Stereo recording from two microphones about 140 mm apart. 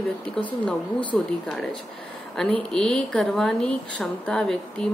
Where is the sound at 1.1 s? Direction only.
5° left (ahead or behind).